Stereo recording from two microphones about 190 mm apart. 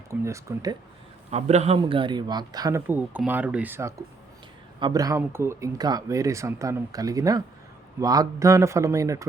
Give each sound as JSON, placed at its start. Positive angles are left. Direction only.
{"t": 0.1, "sound": "speech", "side_deg": -15}
{"t": 1.3, "sound": "a man's voice", "side_deg": -35}